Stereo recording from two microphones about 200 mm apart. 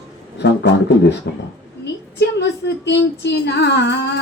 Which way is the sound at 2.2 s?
60° left (ahead or behind).